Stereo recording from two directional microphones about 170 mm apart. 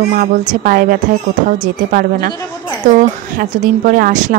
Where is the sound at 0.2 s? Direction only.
55° right (ahead or behind).